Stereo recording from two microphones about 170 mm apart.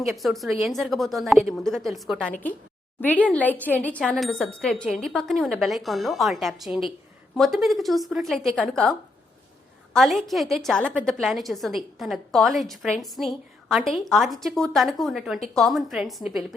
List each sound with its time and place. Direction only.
0.2 s a woman's voice: centre (ahead or behind)